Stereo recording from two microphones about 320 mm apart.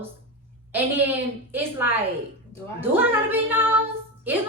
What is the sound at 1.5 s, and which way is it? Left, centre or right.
A woman's voice, centre.